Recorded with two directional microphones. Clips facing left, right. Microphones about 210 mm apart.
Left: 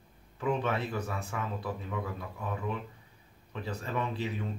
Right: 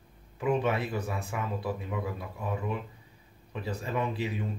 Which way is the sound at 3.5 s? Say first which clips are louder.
Right 2 dB; 10° right (ahead or behind).